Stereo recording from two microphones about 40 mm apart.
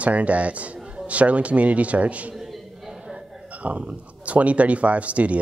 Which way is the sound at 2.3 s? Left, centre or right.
Centre.